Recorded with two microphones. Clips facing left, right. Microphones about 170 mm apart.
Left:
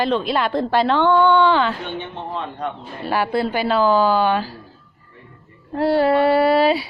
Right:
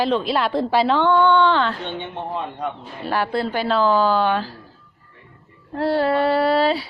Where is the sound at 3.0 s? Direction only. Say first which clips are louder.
Left 2 dB; 5° left (ahead or behind).